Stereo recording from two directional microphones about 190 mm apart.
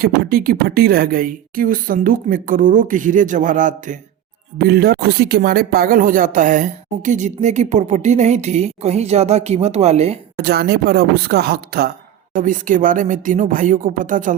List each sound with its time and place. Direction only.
0.0 s speech: 50° right (ahead or behind)
4.5 s speech: 55° right (ahead or behind); by 10.2 s 35° right (ahead or behind)
10.3 s speech: 55° right (ahead or behind)